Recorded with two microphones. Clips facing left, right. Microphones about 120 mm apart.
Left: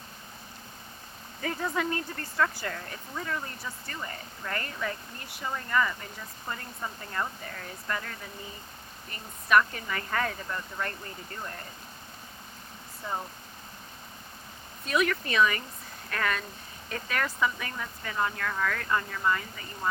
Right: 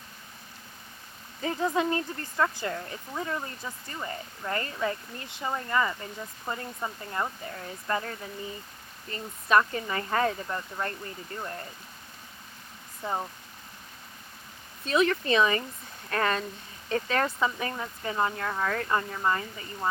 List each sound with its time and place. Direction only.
1.4 s speech: 25° right (ahead or behind)
14.8 s speech: 30° right (ahead or behind)